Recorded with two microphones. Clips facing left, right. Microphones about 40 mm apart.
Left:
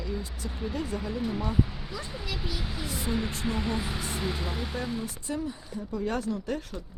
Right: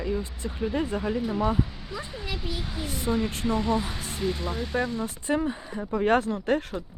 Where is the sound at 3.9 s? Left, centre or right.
Left.